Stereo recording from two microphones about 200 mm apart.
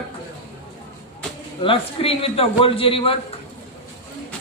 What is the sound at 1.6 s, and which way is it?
A woman's voice, 25° left (ahead or behind).